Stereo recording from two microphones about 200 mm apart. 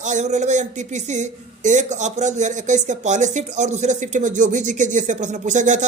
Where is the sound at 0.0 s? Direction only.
35° right (ahead or behind).